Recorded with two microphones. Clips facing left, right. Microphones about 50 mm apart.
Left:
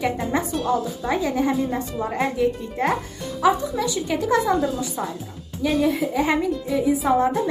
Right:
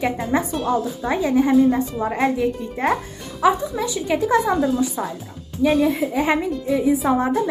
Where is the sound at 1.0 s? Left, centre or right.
Right.